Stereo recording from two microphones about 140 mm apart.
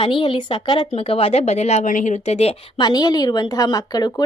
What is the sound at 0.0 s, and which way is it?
Speech, 35° left (ahead or behind).